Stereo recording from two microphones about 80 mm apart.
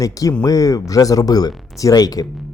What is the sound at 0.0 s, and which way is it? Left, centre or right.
Speech, left.